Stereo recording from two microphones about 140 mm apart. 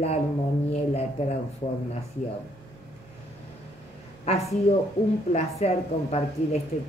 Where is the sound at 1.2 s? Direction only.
50° left (ahead or behind).